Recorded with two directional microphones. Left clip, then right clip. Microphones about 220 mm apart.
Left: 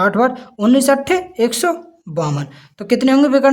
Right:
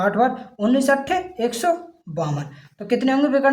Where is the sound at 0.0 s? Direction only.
45° left (ahead or behind).